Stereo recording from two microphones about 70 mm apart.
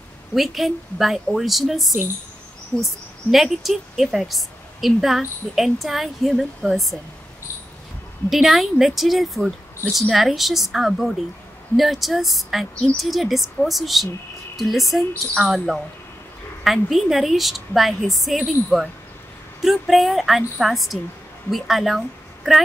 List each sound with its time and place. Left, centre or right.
0.3 s a woman's voice: centre
8.3 s a woman's voice: centre